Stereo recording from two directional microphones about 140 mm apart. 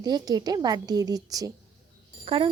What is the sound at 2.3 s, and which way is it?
Speech, 40° right (ahead or behind).